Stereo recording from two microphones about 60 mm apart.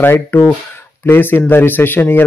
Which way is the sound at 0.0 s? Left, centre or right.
Left.